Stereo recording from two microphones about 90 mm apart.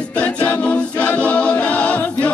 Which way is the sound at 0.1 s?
15° left (ahead or behind).